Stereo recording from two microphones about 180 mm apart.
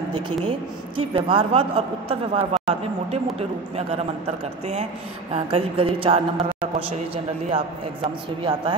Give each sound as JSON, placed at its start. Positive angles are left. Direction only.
{"t": 0.5, "sound": "a woman's voice", "side_deg": -30}
{"t": 5.3, "sound": "a woman's voice", "side_deg": -35}
{"t": 7.4, "sound": "a woman's voice", "side_deg": -30}